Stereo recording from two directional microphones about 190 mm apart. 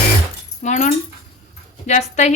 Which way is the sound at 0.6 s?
45° left (ahead or behind).